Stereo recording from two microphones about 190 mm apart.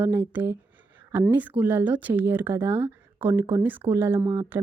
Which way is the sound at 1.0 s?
10° right (ahead or behind).